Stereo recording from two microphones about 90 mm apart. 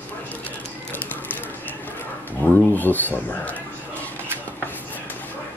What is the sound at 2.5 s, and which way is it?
Speech, 20° left (ahead or behind).